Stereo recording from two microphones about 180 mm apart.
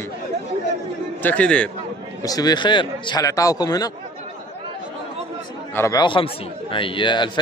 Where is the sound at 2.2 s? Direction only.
20° left (ahead or behind).